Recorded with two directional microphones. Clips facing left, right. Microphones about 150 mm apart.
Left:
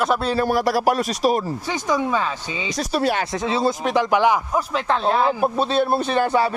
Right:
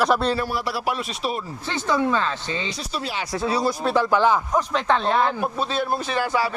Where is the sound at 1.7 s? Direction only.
15° left (ahead or behind).